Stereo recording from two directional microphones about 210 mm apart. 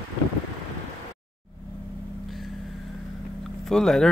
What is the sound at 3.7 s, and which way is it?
Speech, centre (ahead or behind).